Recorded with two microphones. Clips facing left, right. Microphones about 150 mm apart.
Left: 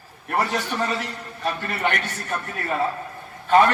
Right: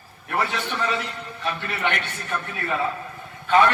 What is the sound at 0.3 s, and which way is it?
A man's voice, 40° left (ahead or behind).